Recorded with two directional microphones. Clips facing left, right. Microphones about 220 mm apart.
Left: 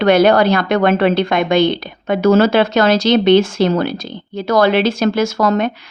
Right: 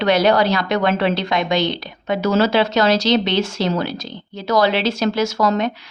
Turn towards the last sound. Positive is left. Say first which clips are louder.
# left 3 dB
turn(degrees=55)  # may be behind; listen again after turning